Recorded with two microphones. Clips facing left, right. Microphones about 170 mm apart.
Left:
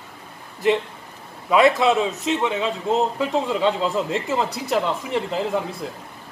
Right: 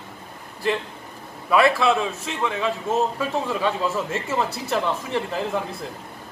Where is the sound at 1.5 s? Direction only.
20° left (ahead or behind).